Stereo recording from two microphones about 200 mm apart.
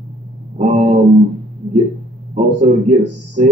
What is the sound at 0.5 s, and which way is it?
Speech, 35° right (ahead or behind).